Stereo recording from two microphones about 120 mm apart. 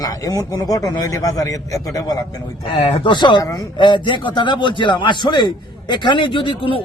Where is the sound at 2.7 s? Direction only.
55° left (ahead or behind); by 3.6 s 30° left (ahead or behind).